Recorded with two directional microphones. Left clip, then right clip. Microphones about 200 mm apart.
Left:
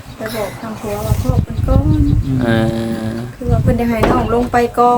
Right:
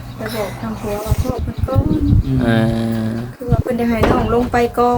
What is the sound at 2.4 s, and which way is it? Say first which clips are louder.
A woman's voice: left 1 dB; 10° left (ahead or behind).